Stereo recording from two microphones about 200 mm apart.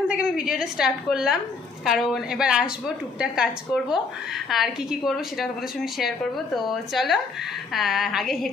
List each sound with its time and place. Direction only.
0.1 s a woman's voice: 5° right (ahead or behind)